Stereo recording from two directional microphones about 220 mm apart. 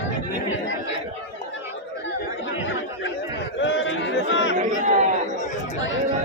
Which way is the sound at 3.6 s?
60° left (ahead or behind).